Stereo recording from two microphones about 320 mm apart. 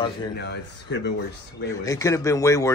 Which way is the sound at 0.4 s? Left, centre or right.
Left.